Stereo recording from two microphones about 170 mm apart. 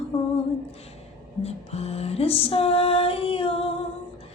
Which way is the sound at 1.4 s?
35° left (ahead or behind).